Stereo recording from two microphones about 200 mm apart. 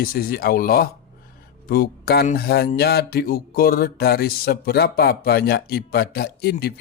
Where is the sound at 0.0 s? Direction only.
45° left (ahead or behind).